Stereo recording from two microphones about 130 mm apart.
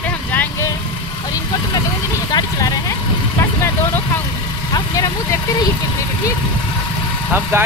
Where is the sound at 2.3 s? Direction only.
30° left (ahead or behind).